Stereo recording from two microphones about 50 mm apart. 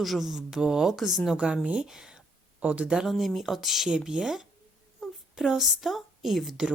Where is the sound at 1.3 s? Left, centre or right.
Right.